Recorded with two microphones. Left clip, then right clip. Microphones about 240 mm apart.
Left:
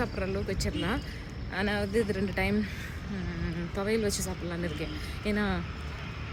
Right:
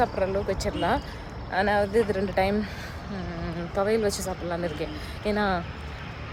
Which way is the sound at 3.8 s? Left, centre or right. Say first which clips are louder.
Right 4 dB; centre.